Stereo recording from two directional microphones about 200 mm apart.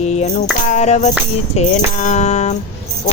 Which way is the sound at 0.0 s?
35° left (ahead or behind).